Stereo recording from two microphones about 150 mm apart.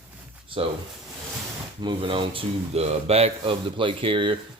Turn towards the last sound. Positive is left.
turn(degrees=-35)  # may be behind; listen again after turning